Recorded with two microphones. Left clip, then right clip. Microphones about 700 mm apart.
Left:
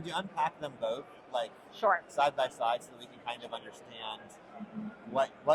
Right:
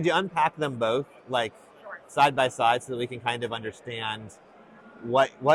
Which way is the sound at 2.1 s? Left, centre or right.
Right.